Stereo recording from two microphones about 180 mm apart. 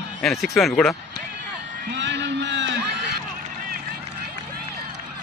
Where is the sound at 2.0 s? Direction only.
75° right (ahead or behind).